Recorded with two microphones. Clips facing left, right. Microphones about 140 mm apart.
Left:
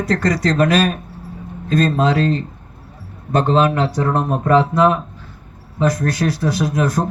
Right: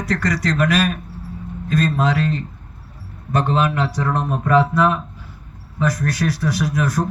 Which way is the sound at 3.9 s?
45° left (ahead or behind).